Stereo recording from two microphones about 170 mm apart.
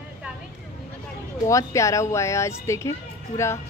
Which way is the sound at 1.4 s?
15° left (ahead or behind).